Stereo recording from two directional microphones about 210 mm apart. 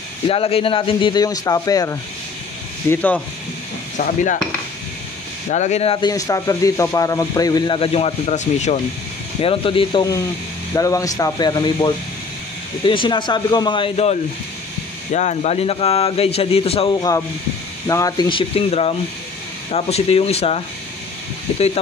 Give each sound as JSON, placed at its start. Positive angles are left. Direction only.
{"t": 0.3, "sound": "speech", "side_deg": 25}
{"t": 3.9, "sound": "stir", "side_deg": 35}
{"t": 5.5, "sound": "speech", "side_deg": 35}
{"t": 15.1, "sound": "speech", "side_deg": 30}